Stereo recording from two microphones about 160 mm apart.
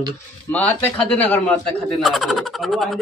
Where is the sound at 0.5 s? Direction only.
10° left (ahead or behind).